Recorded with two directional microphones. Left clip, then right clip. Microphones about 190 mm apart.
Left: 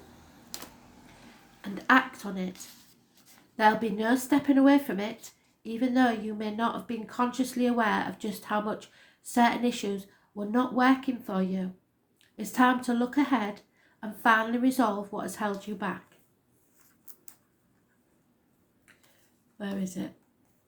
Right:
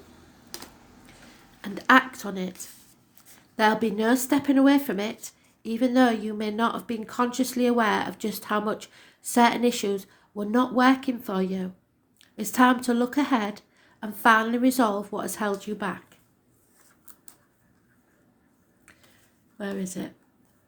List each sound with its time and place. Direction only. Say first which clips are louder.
0.5 s typing: right 2 dB; 5° left (ahead or behind)
1.6 s speech: right 4 dB; 45° right (ahead or behind)
3.6 s a woman's voice: right 2 dB; 45° right (ahead or behind)
19.5 s a woman's voice: right 4 dB; 45° right (ahead or behind)